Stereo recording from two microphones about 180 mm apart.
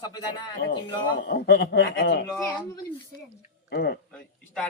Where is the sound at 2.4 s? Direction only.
20° left (ahead or behind).